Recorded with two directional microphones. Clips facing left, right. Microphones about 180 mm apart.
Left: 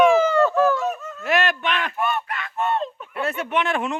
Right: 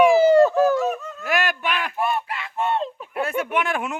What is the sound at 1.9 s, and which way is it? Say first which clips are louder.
Honk: right 1 dB; 30° right (ahead or behind).